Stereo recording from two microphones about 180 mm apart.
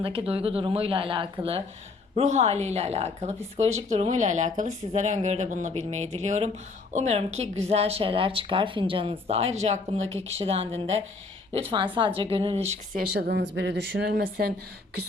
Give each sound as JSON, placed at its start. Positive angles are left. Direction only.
{"t": 0.0, "sound": "speech", "side_deg": -30}
{"t": 11.9, "sound": "speech", "side_deg": -25}
{"t": 13.1, "sound": "speech", "side_deg": -70}